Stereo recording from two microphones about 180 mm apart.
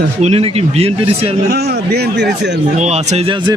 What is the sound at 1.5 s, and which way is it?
A man's voice, 60° right (ahead or behind).